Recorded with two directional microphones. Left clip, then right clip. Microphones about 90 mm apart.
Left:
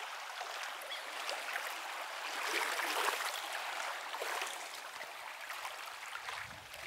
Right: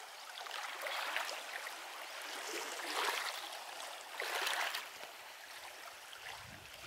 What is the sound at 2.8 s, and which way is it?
Stream, 30° left (ahead or behind).